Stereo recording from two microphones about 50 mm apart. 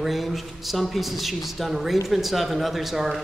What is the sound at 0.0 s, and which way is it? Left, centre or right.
A man's voice, centre.